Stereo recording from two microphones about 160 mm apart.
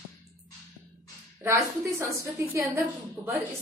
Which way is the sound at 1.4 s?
20° right (ahead or behind).